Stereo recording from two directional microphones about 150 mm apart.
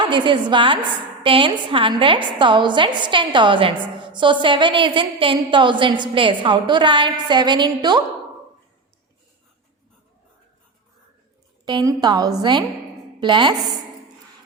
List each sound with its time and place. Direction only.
0.0 s a woman's voice: 30° right (ahead or behind)
11.6 s a woman's voice: 25° right (ahead or behind)